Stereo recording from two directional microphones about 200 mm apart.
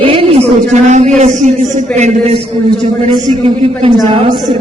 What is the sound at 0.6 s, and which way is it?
A man's voice, 35° right (ahead or behind).